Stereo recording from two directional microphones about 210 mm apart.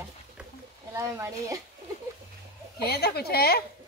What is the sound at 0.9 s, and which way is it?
Speech, 15° right (ahead or behind).